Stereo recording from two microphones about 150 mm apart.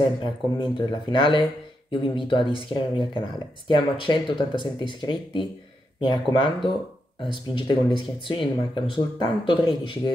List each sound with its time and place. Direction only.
0.2 s speech: 30° left (ahead or behind)